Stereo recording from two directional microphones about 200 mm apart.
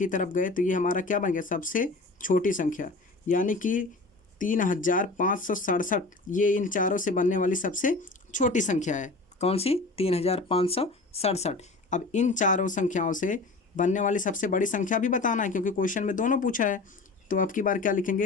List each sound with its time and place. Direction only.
0.0 s speech: 40° left (ahead or behind)